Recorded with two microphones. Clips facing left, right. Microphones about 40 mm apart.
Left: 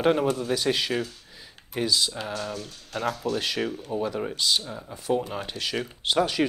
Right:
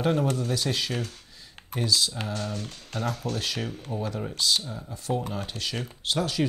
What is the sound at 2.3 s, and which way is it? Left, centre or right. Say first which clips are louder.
Speech: left 1 dB; left.